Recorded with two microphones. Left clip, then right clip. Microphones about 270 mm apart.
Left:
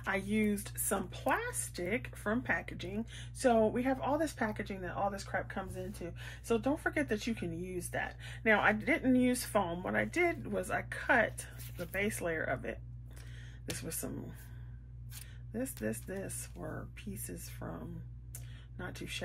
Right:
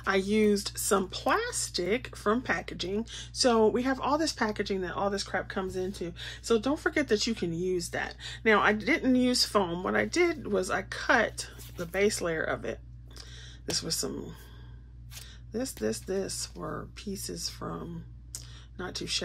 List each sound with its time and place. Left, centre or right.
0.0 s speech: centre
15.5 s speech: centre
18.8 s speech: centre